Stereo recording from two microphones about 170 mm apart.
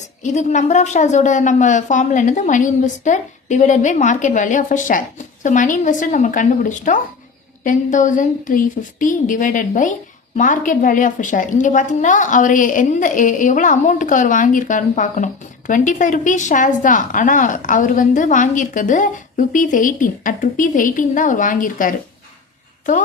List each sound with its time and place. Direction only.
0.2 s a woman's voice: 45° left (ahead or behind)